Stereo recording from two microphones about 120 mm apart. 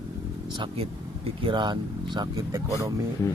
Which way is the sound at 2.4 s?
25° right (ahead or behind).